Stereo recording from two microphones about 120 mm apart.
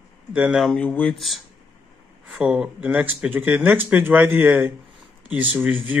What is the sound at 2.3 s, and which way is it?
Speech, 5° right (ahead or behind).